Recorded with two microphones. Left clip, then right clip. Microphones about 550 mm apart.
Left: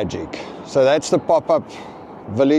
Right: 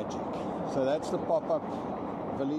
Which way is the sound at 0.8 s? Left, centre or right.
Left.